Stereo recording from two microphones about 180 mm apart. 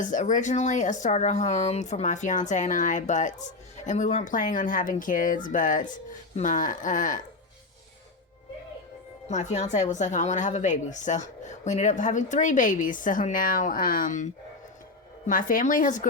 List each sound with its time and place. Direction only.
0.0 s speech: 45° left (ahead or behind)
9.3 s a woman's voice: 40° left (ahead or behind)
15.3 s speech: 50° left (ahead or behind)